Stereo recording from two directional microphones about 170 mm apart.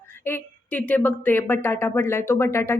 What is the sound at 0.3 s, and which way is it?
A woman's voice, 10° left (ahead or behind).